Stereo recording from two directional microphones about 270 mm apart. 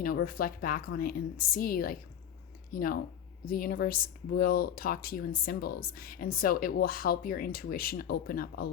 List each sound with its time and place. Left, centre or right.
0.0 s speech: left